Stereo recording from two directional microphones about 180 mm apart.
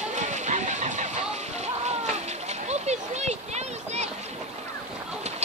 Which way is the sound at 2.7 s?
40° right (ahead or behind).